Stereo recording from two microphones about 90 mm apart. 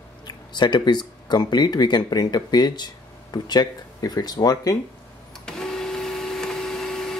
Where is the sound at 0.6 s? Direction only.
55° left (ahead or behind).